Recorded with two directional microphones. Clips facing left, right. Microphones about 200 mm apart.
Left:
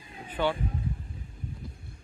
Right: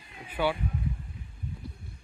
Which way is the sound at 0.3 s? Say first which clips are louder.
Even; 10° right (ahead or behind).